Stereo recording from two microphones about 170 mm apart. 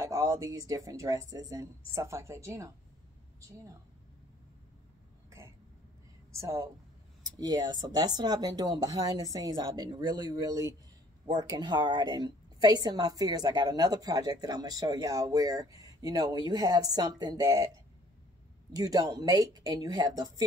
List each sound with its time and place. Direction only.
0.0 s a woman's voice: 20° right (ahead or behind)
6.3 s a woman's voice: 20° right (ahead or behind)
18.7 s a woman's voice: 20° right (ahead or behind)